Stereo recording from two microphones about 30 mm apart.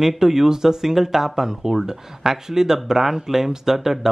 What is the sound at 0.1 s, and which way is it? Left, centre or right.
Speech, centre.